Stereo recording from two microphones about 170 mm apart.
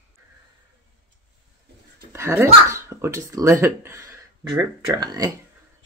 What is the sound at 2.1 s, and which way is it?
Speech, 15° right (ahead or behind).